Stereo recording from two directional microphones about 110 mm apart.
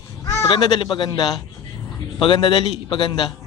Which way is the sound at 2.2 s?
50° left (ahead or behind).